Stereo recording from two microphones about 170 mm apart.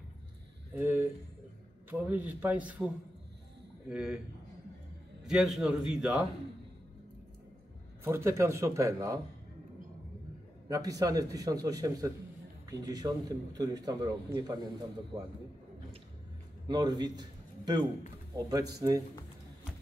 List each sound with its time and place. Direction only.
0.7 s speech: 10° right (ahead or behind)
3.9 s a man's voice: 5° right (ahead or behind)
5.2 s a man's voice: centre (ahead or behind)
8.0 s speech: 15° right (ahead or behind)
10.7 s a man's voice: 20° right (ahead or behind)
16.6 s a man's voice: 25° right (ahead or behind)